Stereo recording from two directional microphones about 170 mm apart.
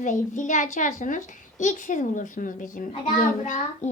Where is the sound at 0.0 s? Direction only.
45° left (ahead or behind).